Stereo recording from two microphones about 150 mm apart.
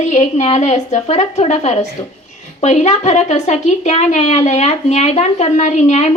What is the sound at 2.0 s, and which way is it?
Speech, 35° left (ahead or behind).